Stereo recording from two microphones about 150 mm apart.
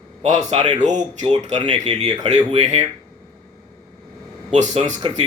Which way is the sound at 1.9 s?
35° right (ahead or behind).